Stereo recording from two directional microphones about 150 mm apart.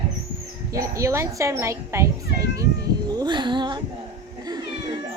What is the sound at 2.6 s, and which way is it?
Cat, 25° right (ahead or behind).